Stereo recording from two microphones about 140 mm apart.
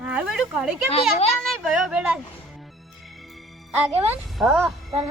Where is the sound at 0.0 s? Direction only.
5° right (ahead or behind).